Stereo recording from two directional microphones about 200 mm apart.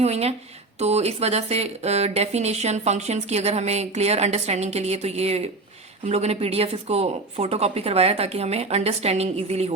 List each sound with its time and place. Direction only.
0.0 s speech: 30° right (ahead or behind)